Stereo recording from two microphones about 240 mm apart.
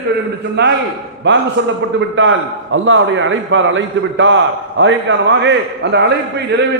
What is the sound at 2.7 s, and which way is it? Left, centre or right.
A man's voice, right.